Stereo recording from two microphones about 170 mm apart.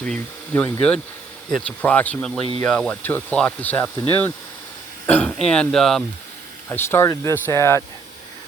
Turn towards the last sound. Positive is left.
turn(degrees=15)  # may be behind; listen again after turning